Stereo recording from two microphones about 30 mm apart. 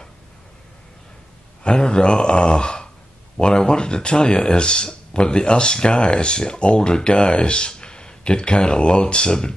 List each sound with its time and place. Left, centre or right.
1.6 s speech: left